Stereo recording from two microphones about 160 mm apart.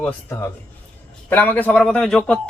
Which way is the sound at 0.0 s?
15° left (ahead or behind).